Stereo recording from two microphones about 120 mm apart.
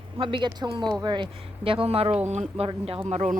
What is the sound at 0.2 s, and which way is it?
Speech, 45° right (ahead or behind).